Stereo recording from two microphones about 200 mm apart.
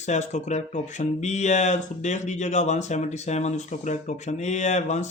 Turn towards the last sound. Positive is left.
turn(degrees=35)  # may be behind; listen again after turning